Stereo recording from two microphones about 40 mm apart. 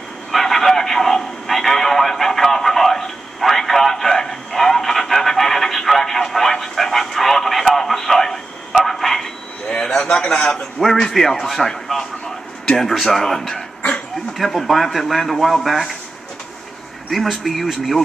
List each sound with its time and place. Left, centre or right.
0.3 s radio: centre
8.8 s a sound: centre; by 10.6 s left
10.6 s a man's voice: centre
17.1 s speech: centre